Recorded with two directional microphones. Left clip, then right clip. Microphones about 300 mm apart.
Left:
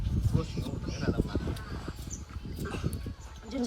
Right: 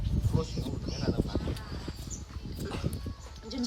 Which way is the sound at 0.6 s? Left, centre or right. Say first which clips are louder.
Even; centre.